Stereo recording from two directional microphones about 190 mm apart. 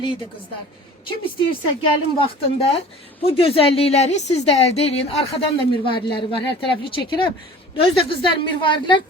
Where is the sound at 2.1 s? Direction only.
30° left (ahead or behind).